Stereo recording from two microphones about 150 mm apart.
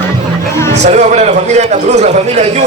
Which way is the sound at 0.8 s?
50° right (ahead or behind).